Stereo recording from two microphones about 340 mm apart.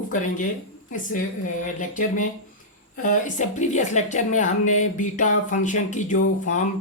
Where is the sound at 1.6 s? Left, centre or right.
Left.